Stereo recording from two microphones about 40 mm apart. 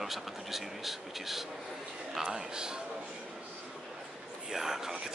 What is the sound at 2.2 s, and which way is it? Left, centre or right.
Speech, centre.